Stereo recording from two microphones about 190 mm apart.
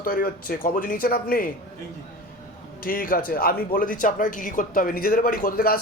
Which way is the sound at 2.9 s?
50° left (ahead or behind).